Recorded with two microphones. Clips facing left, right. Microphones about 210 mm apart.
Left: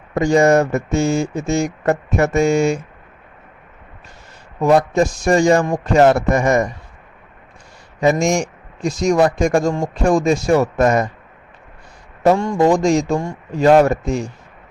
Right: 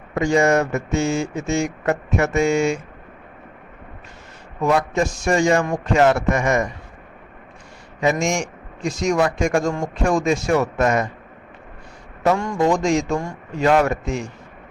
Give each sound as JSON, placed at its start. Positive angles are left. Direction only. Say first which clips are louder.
{"t": 0.1, "sound": "speech", "louder": "left 4 dB", "side_deg": 40}
{"t": 4.6, "sound": "speech", "louder": "left 5 dB", "side_deg": 35}
{"t": 8.0, "sound": "speech", "louder": "left 4 dB", "side_deg": 35}
{"t": 12.2, "sound": "speech", "louder": "left 5 dB", "side_deg": 35}